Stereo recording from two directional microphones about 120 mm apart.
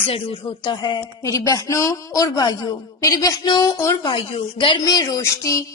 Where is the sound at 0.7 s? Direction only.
40° left (ahead or behind).